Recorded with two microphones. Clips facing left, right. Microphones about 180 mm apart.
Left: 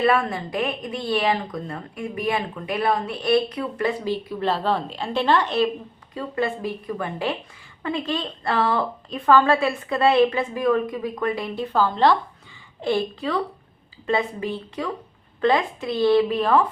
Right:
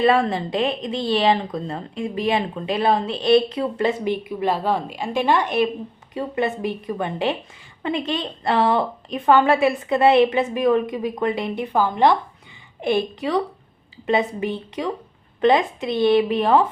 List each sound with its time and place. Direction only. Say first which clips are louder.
0.0 s a woman's voice: right 3 dB; 25° right (ahead or behind)